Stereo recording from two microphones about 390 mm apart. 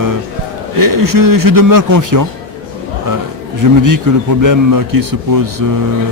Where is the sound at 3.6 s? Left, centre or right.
Right.